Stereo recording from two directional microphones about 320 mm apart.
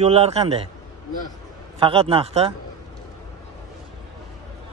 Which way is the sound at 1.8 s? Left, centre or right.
Centre.